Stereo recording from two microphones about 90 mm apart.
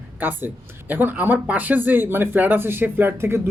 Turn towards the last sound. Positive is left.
turn(degrees=-30)  # may be behind; listen again after turning